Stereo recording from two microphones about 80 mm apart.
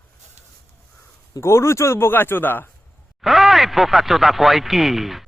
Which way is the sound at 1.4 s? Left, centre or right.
Left.